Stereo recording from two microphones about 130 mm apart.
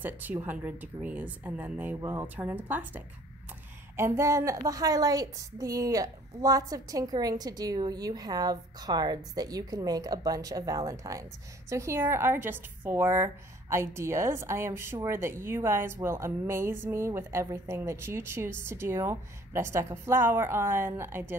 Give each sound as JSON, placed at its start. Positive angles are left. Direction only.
{"t": 0.0, "sound": "a woman's voice", "side_deg": -15}